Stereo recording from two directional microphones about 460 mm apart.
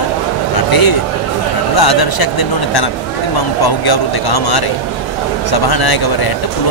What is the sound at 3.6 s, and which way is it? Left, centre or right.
Speech, left.